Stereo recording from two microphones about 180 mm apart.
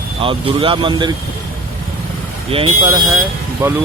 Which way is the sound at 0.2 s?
30° right (ahead or behind).